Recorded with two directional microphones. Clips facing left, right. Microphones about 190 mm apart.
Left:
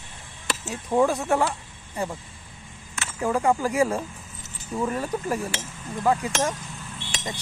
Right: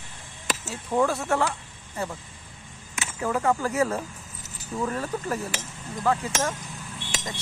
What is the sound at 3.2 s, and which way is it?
Speech, 15° left (ahead or behind).